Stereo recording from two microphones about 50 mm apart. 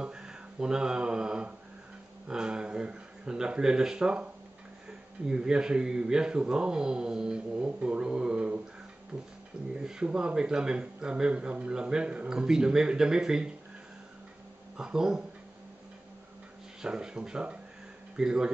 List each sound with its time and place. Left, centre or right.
0.0 s mantra: centre
2.2 s a man's voice: centre
14.8 s a man's voice: centre
16.8 s a man's voice: centre